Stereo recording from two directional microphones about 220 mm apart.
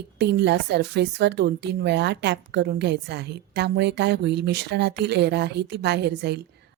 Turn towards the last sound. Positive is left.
turn(degrees=-50)  # may be behind; listen again after turning